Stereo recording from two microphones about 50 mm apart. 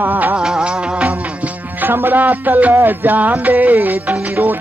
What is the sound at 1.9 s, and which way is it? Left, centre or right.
Music, right.